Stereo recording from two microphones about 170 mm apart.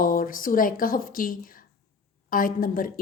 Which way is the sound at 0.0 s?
55° left (ahead or behind).